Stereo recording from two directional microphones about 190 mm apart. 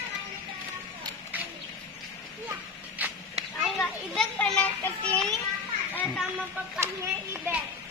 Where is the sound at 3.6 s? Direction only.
Centre (ahead or behind).